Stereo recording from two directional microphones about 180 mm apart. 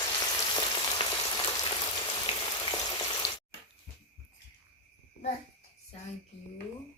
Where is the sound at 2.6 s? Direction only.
25° left (ahead or behind).